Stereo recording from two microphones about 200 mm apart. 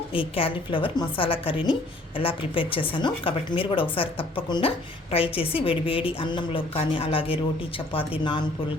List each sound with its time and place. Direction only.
0.1 s a woman's voice: 25° left (ahead or behind)